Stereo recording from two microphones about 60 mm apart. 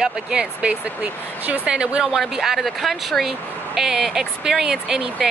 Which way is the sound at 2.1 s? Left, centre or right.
Centre.